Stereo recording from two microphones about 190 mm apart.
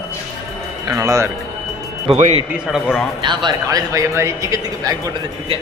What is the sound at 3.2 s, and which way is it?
Speech, 25° right (ahead or behind).